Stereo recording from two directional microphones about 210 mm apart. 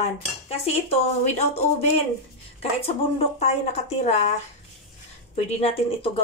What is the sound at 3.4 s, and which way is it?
Speech, 30° left (ahead or behind).